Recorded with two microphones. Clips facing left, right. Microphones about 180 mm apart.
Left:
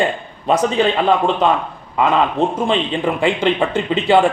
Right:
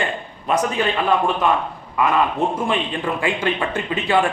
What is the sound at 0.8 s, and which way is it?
Speech, 25° left (ahead or behind).